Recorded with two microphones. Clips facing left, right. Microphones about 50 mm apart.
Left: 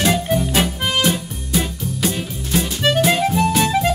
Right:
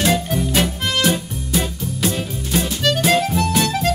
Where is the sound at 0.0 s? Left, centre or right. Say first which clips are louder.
Left 1 dB; centre.